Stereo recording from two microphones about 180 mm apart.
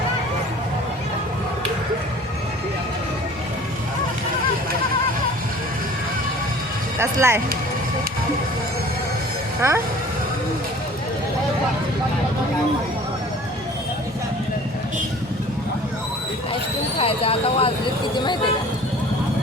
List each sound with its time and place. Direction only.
7.0 s speech: 15° right (ahead or behind)
9.6 s speech: 15° right (ahead or behind)
17.0 s speech: 30° left (ahead or behind)